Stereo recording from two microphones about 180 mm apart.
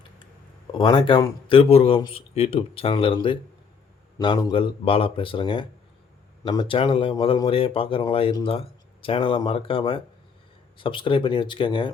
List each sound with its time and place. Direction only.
0.7 s speech: 25° left (ahead or behind)